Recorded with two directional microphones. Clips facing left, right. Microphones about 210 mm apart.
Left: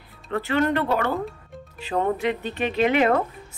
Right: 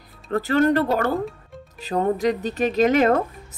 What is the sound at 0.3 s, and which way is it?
Speech, 40° right (ahead or behind).